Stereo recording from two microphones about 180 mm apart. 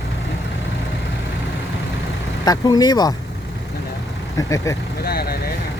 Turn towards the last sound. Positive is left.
turn(degrees=60)  # may be behind; listen again after turning